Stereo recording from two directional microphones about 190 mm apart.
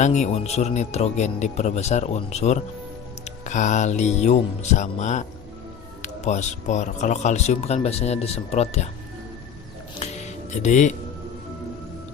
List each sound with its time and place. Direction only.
0.0 s speech: 40° left (ahead or behind)
10.0 s music: 35° left (ahead or behind)